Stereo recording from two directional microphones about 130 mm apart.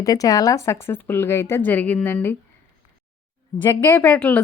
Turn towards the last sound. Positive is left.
turn(degrees=15)  # may be behind; listen again after turning